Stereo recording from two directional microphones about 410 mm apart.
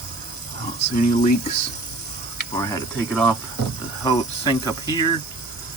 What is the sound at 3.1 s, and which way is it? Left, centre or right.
Speech, centre.